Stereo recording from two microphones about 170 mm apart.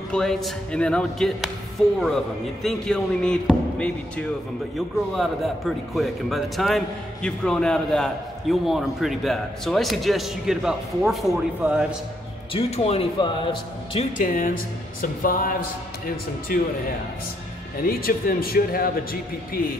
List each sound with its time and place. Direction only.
0.1 s a man's voice: 5° left (ahead or behind)
12.5 s speech: 35° left (ahead or behind)
14.1 s speech: 50° left (ahead or behind)
17.8 s speech: 60° left (ahead or behind)